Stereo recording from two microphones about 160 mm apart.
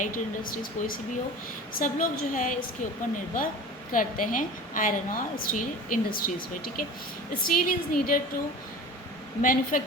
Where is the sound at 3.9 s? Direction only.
55° left (ahead or behind).